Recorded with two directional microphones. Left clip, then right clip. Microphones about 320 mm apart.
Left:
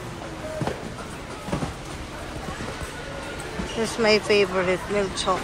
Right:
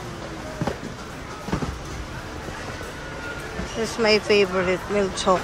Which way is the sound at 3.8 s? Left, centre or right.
Centre.